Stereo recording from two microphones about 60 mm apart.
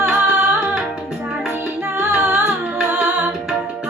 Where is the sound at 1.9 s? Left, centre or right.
Right.